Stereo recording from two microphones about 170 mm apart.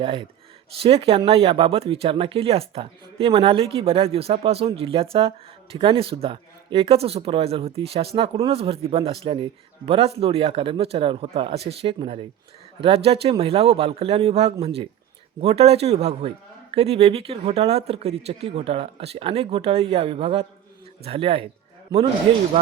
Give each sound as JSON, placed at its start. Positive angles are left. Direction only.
{"t": 0.0, "sound": "speech", "side_deg": -30}